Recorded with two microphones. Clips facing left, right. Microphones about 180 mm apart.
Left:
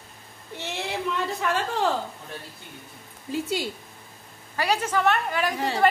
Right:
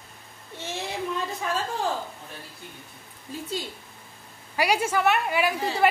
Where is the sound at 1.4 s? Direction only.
70° left (ahead or behind).